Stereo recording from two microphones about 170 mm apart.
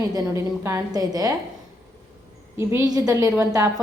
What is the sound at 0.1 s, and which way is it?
A woman's voice, 20° right (ahead or behind).